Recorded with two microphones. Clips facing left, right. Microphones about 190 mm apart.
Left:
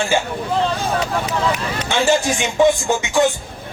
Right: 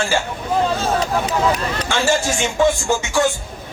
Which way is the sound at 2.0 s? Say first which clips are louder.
Left 1 dB; 15° left (ahead or behind).